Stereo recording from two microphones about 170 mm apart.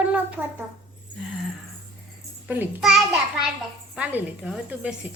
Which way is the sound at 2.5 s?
5° right (ahead or behind).